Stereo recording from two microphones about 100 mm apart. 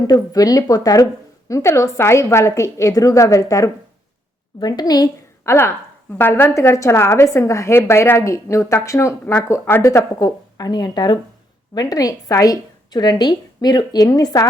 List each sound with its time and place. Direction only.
0.1 s a woman's voice: 35° left (ahead or behind)
4.6 s a woman's voice: 45° left (ahead or behind)
5.4 s a woman's voice: 25° left (ahead or behind)